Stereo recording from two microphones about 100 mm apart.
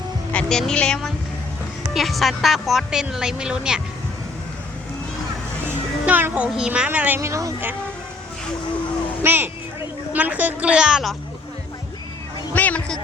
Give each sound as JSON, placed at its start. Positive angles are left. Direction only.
{"t": 0.4, "sound": "speech", "side_deg": 5}
{"t": 5.6, "sound": "music", "side_deg": -20}
{"t": 6.5, "sound": "a woman's voice", "side_deg": -10}
{"t": 7.2, "sound": "speech", "side_deg": -30}
{"t": 9.2, "sound": "a woman's voice", "side_deg": -20}
{"t": 12.5, "sound": "speech", "side_deg": 15}